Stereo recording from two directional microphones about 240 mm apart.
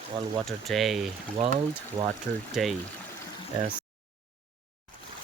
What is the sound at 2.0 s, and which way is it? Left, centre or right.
Speech, centre.